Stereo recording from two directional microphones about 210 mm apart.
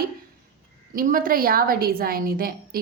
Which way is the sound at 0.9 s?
40° right (ahead or behind).